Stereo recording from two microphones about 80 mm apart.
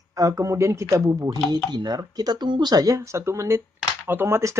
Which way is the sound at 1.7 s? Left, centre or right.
Right.